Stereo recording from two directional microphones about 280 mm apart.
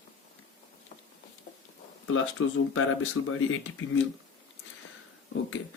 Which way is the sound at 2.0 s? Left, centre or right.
Left.